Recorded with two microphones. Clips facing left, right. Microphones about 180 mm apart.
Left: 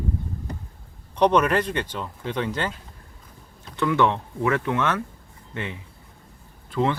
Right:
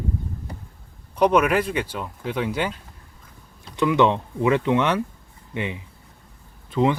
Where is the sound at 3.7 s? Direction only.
15° right (ahead or behind).